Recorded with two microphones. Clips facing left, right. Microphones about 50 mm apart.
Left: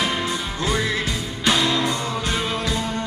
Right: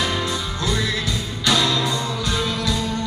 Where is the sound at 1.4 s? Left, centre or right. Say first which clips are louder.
Even; left.